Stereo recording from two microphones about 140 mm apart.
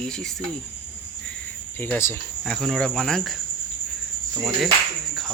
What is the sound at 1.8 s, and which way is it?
Speech, 15° left (ahead or behind).